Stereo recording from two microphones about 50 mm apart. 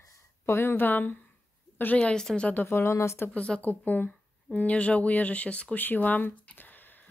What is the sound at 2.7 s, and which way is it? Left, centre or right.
Speech, left.